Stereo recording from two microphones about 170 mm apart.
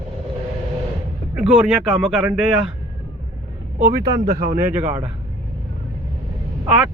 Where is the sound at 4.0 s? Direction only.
60° right (ahead or behind).